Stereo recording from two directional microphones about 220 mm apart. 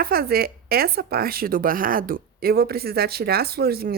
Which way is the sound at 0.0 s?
45° right (ahead or behind).